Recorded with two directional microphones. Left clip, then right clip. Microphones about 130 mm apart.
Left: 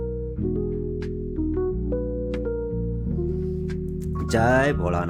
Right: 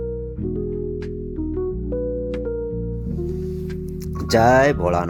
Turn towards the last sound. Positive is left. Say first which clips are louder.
# right 6 dB
turn(degrees=-15)  # may be behind; listen again after turning